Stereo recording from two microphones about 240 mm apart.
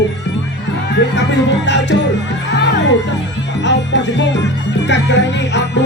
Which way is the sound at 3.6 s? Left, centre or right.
Left.